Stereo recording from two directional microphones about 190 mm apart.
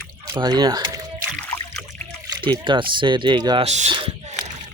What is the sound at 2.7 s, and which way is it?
Speech, 25° right (ahead or behind).